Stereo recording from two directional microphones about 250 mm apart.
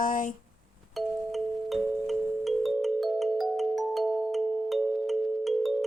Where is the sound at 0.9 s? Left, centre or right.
Centre.